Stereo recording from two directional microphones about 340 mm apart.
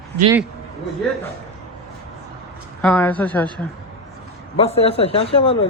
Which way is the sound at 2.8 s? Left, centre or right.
Centre.